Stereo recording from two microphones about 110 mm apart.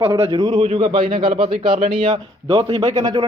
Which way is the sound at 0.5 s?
70° right (ahead or behind).